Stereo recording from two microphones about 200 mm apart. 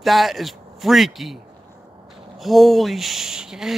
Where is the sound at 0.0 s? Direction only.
Centre (ahead or behind).